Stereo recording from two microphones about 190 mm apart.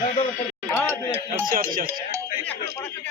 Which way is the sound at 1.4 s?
50° right (ahead or behind).